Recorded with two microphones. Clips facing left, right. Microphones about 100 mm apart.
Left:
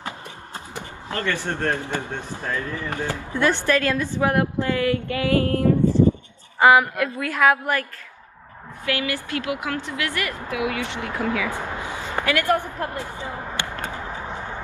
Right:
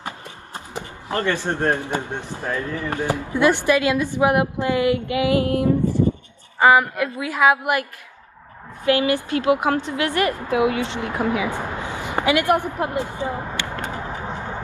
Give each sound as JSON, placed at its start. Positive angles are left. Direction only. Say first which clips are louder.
{"t": 0.7, "sound": "speech", "louder": "right 5 dB", "side_deg": -20}
{"t": 6.6, "sound": "speech", "louder": "even", "side_deg": 0}
{"t": 8.8, "sound": "a woman's voice", "louder": "right 7 dB", "side_deg": -20}
{"t": 12.0, "sound": "a sound", "louder": "right 4 dB", "side_deg": -15}